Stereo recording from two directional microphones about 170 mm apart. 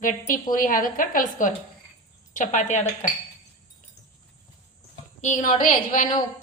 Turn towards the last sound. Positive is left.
turn(degrees=50)  # may be behind; listen again after turning